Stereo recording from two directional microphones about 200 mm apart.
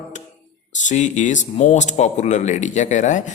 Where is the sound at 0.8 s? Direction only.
35° left (ahead or behind).